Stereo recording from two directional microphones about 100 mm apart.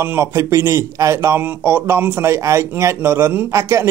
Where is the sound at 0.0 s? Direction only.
25° right (ahead or behind).